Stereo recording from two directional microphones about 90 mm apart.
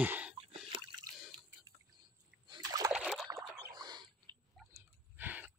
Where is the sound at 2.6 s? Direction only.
40° right (ahead or behind).